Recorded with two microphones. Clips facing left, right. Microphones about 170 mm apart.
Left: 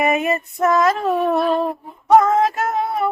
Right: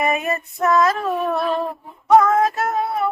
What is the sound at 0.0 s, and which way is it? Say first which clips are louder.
Female singing: left 3 dB; 20° left (ahead or behind).